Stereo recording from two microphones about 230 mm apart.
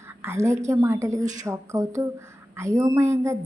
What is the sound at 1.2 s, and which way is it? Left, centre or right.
Speech, right.